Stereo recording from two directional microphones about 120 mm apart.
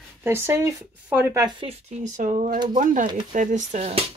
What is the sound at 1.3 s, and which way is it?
Speech, 35° right (ahead or behind).